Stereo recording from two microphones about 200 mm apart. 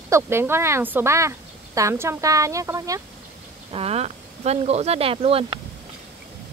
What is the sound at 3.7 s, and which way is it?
Speech, 30° right (ahead or behind).